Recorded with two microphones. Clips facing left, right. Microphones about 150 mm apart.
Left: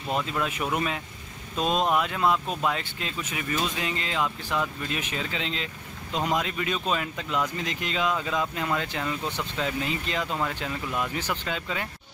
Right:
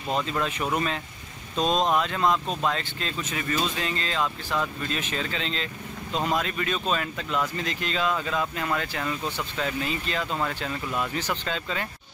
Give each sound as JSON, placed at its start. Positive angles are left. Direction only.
{"t": 0.1, "sound": "speech", "side_deg": 5}